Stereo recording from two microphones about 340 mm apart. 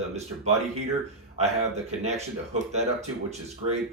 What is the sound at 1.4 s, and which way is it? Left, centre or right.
Speech, centre.